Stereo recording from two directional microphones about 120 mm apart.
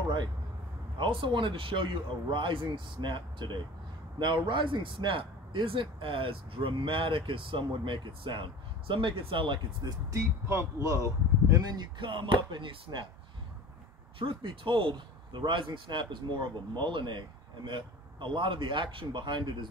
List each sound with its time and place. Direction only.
0.9 s speech: 45° right (ahead or behind)
10.1 s speech: 25° right (ahead or behind); by 13.0 s 45° right (ahead or behind)
14.1 s speech: 45° right (ahead or behind)